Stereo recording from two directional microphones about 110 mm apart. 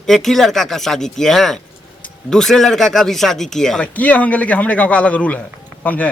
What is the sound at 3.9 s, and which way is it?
A man's voice, 15° left (ahead or behind).